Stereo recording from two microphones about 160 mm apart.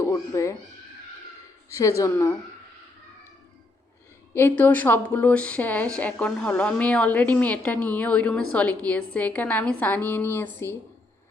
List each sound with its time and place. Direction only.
0.0 s a sound: 20° left (ahead or behind)
1.7 s a woman's voice: 20° left (ahead or behind)
4.4 s a woman's voice: 10° left (ahead or behind)